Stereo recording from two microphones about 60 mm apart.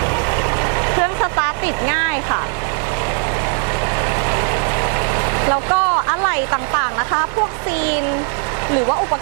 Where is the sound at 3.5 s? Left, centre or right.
Right.